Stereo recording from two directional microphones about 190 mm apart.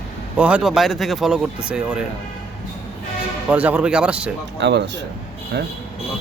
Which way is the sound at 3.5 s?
10° right (ahead or behind).